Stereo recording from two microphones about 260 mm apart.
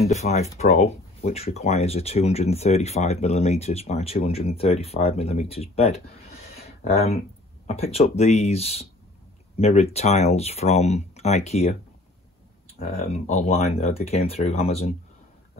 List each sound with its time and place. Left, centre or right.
0.0 s speech: left
12.7 s speech: left